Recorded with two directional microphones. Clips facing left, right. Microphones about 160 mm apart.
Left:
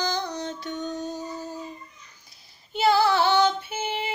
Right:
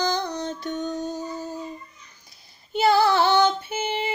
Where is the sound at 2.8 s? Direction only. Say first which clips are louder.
Right 2 dB; 5° left (ahead or behind).